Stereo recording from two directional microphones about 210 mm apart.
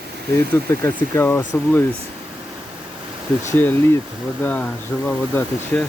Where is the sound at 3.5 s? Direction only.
10° left (ahead or behind).